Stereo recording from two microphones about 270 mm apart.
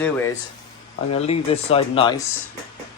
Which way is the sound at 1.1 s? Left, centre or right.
Left.